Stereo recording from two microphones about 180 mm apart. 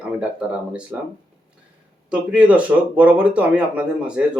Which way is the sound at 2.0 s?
5° right (ahead or behind).